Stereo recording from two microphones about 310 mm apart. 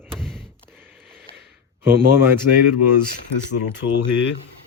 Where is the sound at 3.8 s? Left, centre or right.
Left.